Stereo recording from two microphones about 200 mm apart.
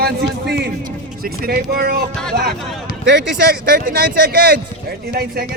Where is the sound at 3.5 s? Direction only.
50° right (ahead or behind).